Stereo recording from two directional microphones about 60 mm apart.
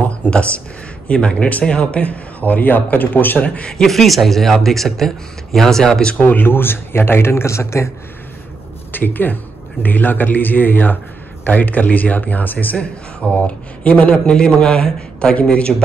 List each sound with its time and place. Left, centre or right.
0.3 s a sound: left
1.0 s speech: centre
3.7 s speech: centre
6.2 s speech: left
8.9 s speech: left; by 15.7 s centre